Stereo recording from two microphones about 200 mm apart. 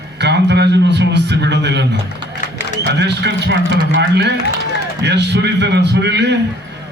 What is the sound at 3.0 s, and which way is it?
A man's voice, 60° right (ahead or behind).